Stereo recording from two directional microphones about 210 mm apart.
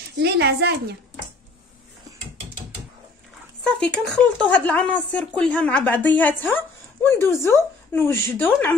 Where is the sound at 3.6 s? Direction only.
5° left (ahead or behind).